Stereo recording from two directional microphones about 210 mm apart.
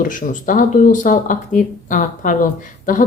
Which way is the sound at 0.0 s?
40° left (ahead or behind).